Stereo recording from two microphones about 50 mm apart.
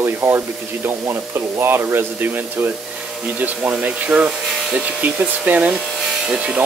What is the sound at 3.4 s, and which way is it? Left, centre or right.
Speech, right.